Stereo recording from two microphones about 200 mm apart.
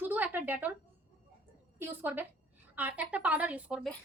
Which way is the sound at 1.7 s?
10° right (ahead or behind).